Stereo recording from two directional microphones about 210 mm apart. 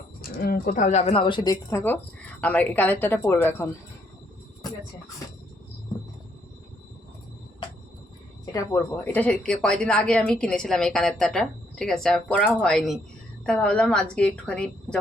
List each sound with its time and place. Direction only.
0.2 s a woman's voice: 45° left (ahead or behind); by 3.7 s 10° left (ahead or behind)
8.5 s speech: 10° left (ahead or behind)